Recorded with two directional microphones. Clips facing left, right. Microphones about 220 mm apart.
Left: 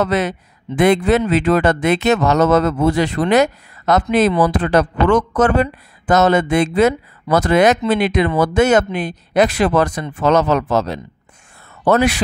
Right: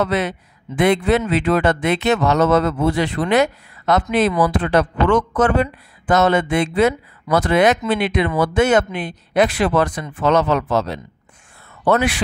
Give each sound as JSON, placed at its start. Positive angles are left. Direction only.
{"t": 0.0, "sound": "speech", "side_deg": 40}